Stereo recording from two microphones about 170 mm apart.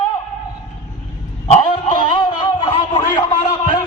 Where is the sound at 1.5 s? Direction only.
30° left (ahead or behind).